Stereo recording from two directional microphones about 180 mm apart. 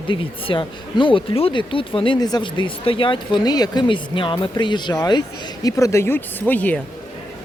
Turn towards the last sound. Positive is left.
turn(degrees=10)  # may be behind; listen again after turning